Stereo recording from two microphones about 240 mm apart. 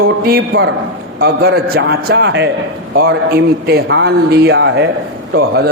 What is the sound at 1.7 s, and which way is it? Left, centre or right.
A man's voice, right.